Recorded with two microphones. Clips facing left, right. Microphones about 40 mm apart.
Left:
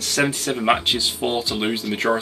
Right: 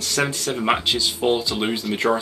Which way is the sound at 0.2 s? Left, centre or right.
Centre.